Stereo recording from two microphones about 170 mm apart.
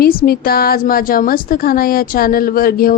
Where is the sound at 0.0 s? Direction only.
60° left (ahead or behind).